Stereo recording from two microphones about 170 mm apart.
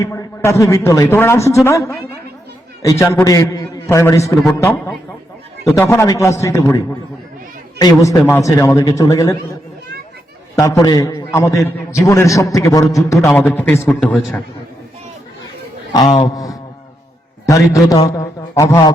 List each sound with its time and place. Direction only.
0.0 s a man's voice: 15° left (ahead or behind)
3.0 s a man's voice: 15° left (ahead or behind)
10.5 s a man's voice: 20° left (ahead or behind)
13.1 s a man's voice: 10° left (ahead or behind)
13.8 s a man's voice: centre (ahead or behind)
16.2 s a man's voice: 20° left (ahead or behind)